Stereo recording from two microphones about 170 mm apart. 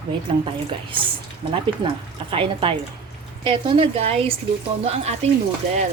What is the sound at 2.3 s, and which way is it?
A woman's voice, 30° right (ahead or behind).